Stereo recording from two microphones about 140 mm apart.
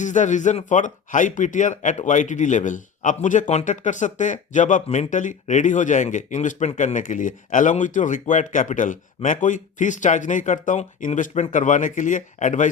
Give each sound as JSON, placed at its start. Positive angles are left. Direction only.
{"t": 0.0, "sound": "a man's voice", "side_deg": 60}